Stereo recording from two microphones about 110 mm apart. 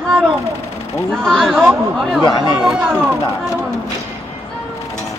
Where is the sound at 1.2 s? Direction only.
Centre (ahead or behind).